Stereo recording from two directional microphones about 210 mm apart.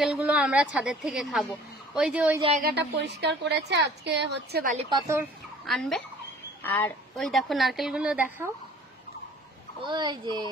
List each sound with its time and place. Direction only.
0.0 s a woman's voice: 5° right (ahead or behind)
2.5 s a woman's voice: 50° right (ahead or behind)
4.7 s a woman's voice: 20° right (ahead or behind)
5.7 s a woman's voice: centre (ahead or behind)
9.8 s a child's voice: 20° right (ahead or behind)